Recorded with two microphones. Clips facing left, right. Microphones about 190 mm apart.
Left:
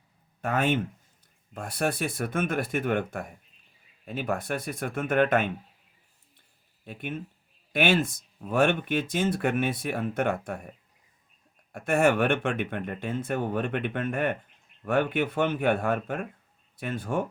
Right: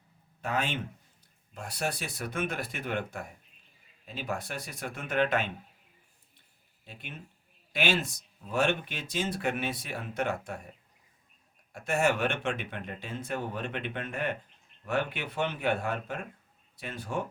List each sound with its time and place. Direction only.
0.4 s speech: 55° left (ahead or behind)
6.8 s speech: 55° left (ahead or behind)
11.7 s speech: 55° left (ahead or behind)